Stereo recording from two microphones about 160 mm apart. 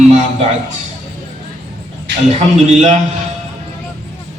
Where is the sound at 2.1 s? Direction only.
90° right.